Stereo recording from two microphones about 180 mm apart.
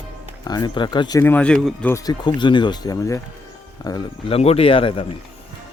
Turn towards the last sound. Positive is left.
turn(degrees=30)  # may be behind; listen again after turning